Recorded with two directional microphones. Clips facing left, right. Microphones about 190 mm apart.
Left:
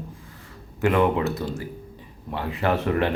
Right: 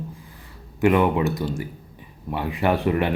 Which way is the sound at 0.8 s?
15° right (ahead or behind).